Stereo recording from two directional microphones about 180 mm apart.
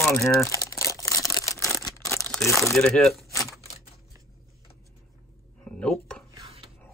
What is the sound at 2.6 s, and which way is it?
Speech, centre (ahead or behind).